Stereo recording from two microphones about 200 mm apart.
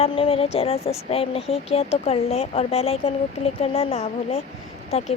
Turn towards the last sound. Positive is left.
turn(degrees=30)  # may be behind; listen again after turning